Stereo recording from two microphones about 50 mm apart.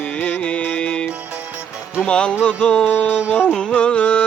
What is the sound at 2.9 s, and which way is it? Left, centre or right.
Music, left.